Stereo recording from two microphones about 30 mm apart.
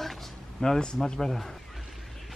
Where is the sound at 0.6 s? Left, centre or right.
Left.